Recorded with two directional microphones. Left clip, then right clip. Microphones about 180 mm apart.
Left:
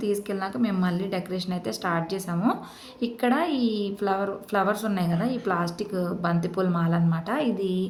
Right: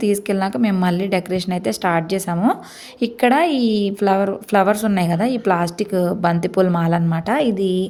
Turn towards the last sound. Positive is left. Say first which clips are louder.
# right 8 dB
turn(degrees=-35)  # may be behind; listen again after turning